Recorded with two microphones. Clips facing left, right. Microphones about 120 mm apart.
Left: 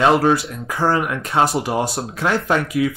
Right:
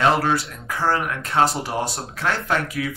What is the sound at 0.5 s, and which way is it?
Speech, 20° left (ahead or behind).